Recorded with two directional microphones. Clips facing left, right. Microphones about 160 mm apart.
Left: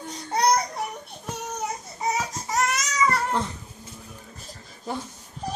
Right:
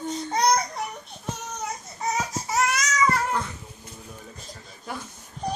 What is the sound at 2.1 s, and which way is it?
Baby cry, centre (ahead or behind).